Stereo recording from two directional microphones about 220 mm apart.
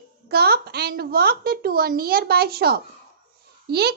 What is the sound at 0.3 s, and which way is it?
A child's voice, 45° right (ahead or behind).